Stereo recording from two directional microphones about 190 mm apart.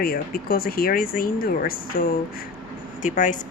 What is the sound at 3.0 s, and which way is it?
Speech, 40° left (ahead or behind).